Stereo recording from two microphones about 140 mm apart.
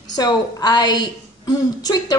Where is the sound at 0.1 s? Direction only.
30° left (ahead or behind).